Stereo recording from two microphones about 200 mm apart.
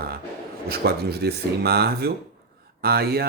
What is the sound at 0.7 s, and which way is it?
Speech, 55° right (ahead or behind).